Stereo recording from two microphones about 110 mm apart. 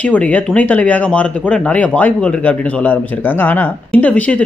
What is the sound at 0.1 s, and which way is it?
Speech, 10° left (ahead or behind).